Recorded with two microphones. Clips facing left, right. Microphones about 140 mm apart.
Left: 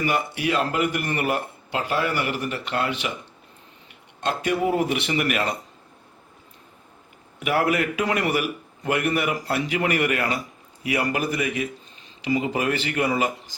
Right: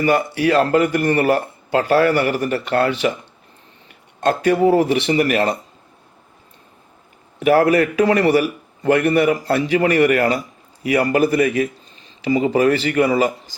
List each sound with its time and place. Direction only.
0.0 s speech: 40° right (ahead or behind)
4.2 s speech: 45° right (ahead or behind)
4.6 s speech: 35° right (ahead or behind)
7.3 s speech: 40° right (ahead or behind)